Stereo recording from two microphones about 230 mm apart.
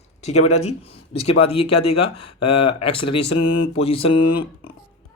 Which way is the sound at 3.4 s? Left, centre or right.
Left.